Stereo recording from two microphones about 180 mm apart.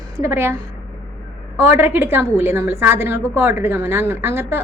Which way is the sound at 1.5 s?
10° right (ahead or behind).